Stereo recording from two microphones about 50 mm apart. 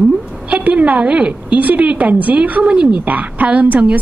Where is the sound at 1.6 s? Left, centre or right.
Right.